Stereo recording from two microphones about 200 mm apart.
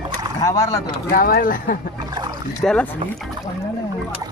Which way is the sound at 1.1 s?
45° left (ahead or behind).